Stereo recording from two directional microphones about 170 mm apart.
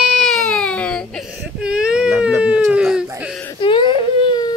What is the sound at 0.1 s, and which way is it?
Baby cry, centre (ahead or behind).